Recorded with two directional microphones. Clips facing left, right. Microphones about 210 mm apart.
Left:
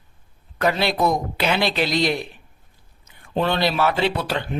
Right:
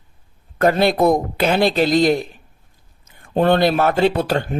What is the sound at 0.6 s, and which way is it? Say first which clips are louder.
Speech: right 5 dB; 50° right (ahead or behind).